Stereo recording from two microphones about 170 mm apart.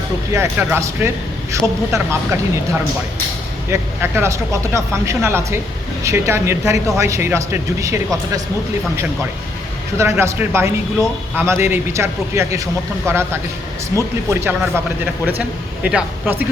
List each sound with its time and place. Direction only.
0.3 s speech: 15° right (ahead or behind)
10.0 s speech: 15° right (ahead or behind)